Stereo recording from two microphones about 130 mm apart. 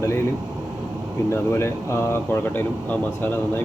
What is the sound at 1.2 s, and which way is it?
Speech, 20° left (ahead or behind).